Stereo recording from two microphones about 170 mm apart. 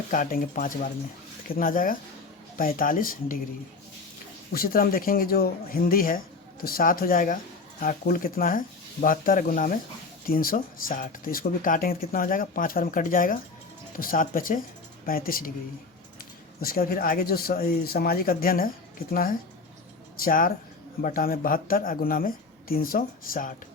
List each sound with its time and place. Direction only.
0.1 s speech: 55° left (ahead or behind)
4.5 s speech: 60° left (ahead or behind)
16.6 s speech: 60° left (ahead or behind)